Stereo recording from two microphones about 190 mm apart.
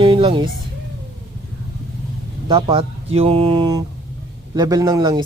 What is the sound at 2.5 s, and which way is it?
Speech, 25° right (ahead or behind).